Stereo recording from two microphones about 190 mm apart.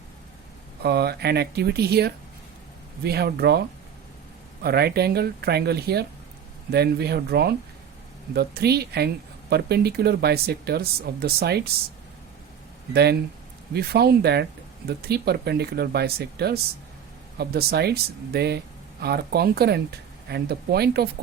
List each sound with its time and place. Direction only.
0.8 s speech: 55° right (ahead or behind)
4.6 s speech: 55° right (ahead or behind)
12.9 s speech: 60° right (ahead or behind)